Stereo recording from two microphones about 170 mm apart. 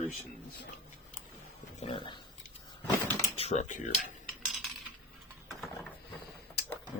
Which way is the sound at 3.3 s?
40° left (ahead or behind).